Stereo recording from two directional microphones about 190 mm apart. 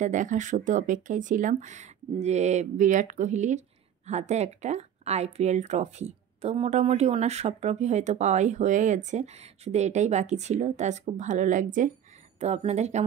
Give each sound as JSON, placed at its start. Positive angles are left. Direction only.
{"t": 0.0, "sound": "speech", "side_deg": -40}